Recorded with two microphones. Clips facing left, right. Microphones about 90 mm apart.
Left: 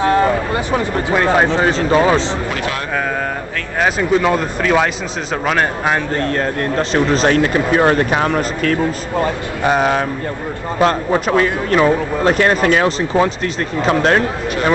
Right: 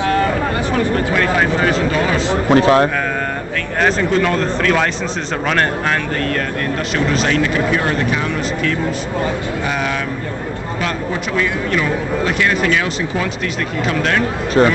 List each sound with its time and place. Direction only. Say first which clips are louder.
0.0 s speech: left 2 dB; 20° left (ahead or behind)
2.5 s a man's voice: right 11 dB; 35° right (ahead or behind)
3.8 s speech: left 1 dB; 10° left (ahead or behind)
6.1 s speech: left 2 dB; 30° left (ahead or behind)